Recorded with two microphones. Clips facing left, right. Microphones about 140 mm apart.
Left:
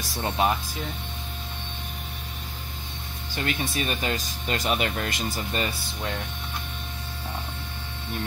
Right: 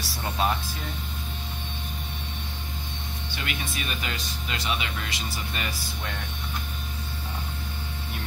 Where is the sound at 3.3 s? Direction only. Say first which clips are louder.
Left 6 dB; 40° left (ahead or behind).